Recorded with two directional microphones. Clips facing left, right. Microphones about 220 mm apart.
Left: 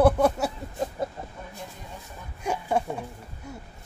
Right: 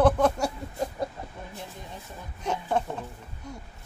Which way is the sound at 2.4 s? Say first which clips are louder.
Left 1 dB; 10° left (ahead or behind).